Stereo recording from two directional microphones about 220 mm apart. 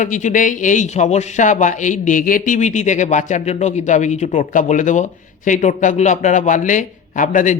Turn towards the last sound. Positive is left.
turn(degrees=35)  # may be behind; listen again after turning